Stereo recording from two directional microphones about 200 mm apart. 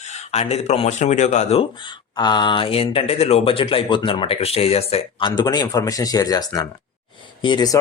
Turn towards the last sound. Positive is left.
turn(degrees=20)  # may be behind; listen again after turning